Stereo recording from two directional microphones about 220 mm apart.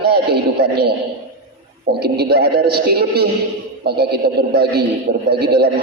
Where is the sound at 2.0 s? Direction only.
45° right (ahead or behind).